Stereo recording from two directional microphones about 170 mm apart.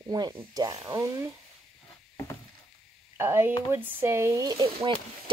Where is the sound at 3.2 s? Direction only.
15° right (ahead or behind).